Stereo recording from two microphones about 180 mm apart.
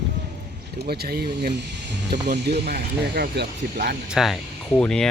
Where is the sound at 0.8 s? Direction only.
60° right (ahead or behind).